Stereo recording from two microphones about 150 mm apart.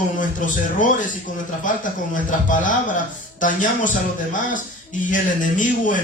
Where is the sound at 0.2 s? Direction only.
60° left (ahead or behind).